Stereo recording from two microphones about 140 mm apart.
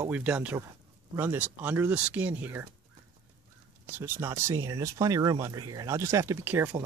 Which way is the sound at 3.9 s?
15° right (ahead or behind).